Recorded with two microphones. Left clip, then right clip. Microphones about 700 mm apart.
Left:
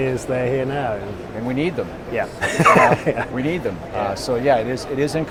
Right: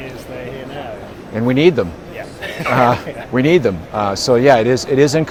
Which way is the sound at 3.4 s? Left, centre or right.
Right.